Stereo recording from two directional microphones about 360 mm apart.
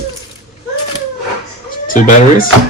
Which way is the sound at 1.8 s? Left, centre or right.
Left.